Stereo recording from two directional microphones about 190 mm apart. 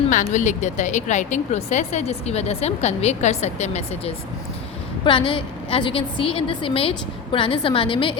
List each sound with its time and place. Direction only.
0.1 s a woman's voice: 40° left (ahead or behind)